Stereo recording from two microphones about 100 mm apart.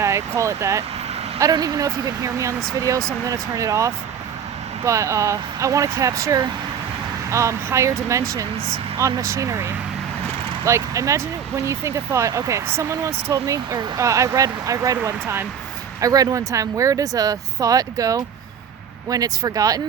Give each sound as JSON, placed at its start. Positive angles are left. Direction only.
{"t": 0.0, "sound": "speech", "side_deg": -30}